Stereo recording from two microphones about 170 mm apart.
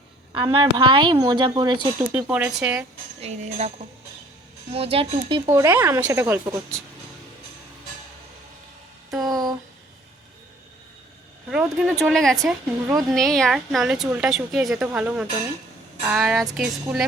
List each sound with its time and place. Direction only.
0.3 s a woman's voice: 30° right (ahead or behind)
2.0 s a woman's voice: 10° right (ahead or behind)
3.2 s speech: 40° right (ahead or behind)
4.7 s speech: 35° right (ahead or behind)
5.5 s a woman's voice: 15° right (ahead or behind)
9.2 s a sound: 25° right (ahead or behind)
11.5 s a woman's voice: 5° right (ahead or behind)